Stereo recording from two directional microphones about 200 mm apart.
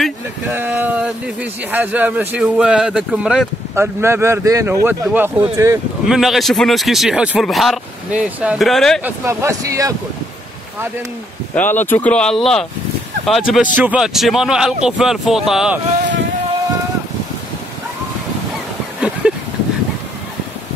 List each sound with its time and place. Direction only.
0.0 s speech: 5° right (ahead or behind)
6.0 s speech: centre (ahead or behind)
9.0 s speech: 15° right (ahead or behind)
11.5 s speech: 10° left (ahead or behind)
18.9 s a sound: 5° right (ahead or behind)